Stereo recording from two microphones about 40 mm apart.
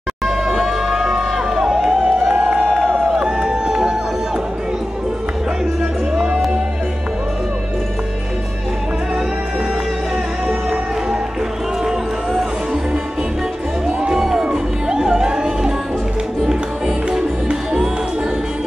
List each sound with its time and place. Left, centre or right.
0.5 s music: centre
3.1 s music: centre
6.1 s music: right
14.2 s music: centre